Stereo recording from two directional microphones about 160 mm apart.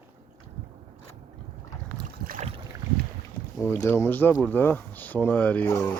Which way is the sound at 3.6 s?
15° left (ahead or behind).